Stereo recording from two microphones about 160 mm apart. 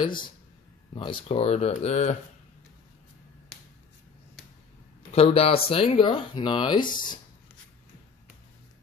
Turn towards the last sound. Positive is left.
turn(degrees=30)  # may be behind; listen again after turning